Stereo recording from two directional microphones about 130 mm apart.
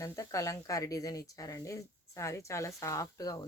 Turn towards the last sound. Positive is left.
turn(degrees=30)  # may be behind; listen again after turning